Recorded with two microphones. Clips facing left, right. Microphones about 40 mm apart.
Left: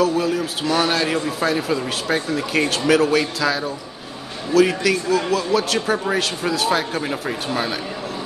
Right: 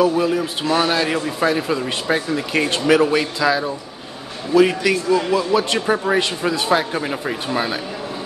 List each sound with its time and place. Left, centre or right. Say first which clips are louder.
0.0 s a man's voice: right 2 dB; right